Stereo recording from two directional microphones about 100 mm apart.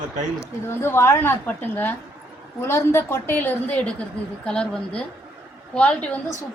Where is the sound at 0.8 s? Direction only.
25° left (ahead or behind); by 4.7 s 10° left (ahead or behind).